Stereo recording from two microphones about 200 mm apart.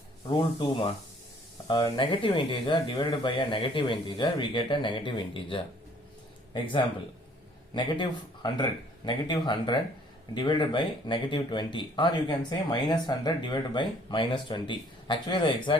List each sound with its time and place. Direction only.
0.3 s speech: 25° left (ahead or behind)
7.7 s speech: 20° left (ahead or behind)